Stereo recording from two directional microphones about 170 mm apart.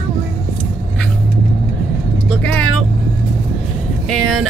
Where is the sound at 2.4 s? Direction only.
5° left (ahead or behind).